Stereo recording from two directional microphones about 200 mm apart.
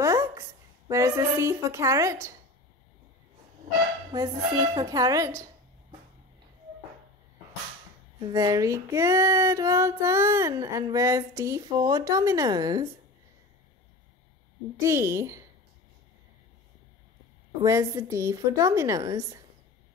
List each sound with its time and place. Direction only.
0.0 s a woman's voice: 15° right (ahead or behind)
4.1 s female singing: 20° right (ahead or behind)
8.2 s female singing: 20° right (ahead or behind)
14.8 s female singing: 15° right (ahead or behind)
17.6 s female singing: 15° right (ahead or behind)